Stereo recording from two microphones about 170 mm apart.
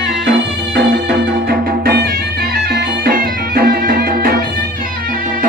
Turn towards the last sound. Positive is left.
turn(degrees=-65)  # may be behind; listen again after turning